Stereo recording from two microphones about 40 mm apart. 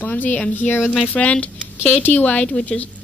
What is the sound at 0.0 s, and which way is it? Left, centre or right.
Speech, left.